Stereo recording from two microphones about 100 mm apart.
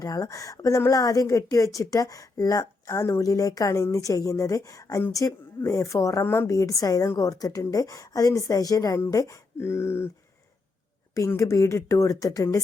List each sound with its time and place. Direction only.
0.0 s a woman's voice: 35° left (ahead or behind)
11.3 s a woman's voice: 35° left (ahead or behind)